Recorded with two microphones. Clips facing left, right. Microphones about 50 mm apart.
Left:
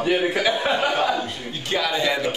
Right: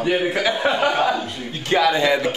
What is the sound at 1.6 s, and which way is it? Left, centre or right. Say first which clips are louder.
Speech: right 6 dB; right.